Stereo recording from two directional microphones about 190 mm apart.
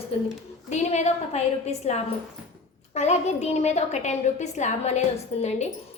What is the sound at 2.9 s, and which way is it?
A woman's voice, 35° left (ahead or behind).